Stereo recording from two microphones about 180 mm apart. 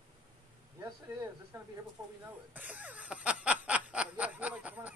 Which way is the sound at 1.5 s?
15° right (ahead or behind).